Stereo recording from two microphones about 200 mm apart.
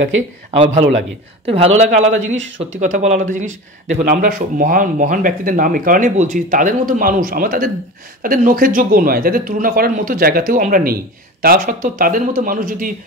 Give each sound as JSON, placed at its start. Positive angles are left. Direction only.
{"t": 0.5, "sound": "speech", "side_deg": -25}
{"t": 2.1, "sound": "speech", "side_deg": -70}
{"t": 2.8, "sound": "speech", "side_deg": -35}